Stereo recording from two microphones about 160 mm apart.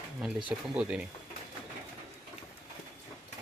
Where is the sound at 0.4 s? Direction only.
10° right (ahead or behind).